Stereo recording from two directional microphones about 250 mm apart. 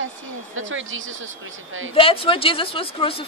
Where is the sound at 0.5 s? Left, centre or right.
Right.